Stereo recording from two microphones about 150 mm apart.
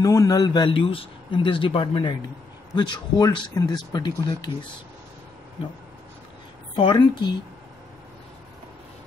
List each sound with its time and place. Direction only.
0.0 s speech: 20° left (ahead or behind)
6.7 s speech: 35° left (ahead or behind)